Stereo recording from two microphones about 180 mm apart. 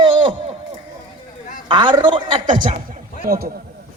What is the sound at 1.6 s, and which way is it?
A woman's voice, 25° right (ahead or behind).